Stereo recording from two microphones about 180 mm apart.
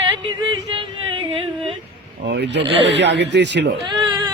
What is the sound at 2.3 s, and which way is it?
Speech, 70° right (ahead or behind).